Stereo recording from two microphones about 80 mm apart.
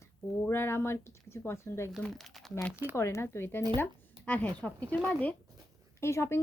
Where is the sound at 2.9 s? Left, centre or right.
Left.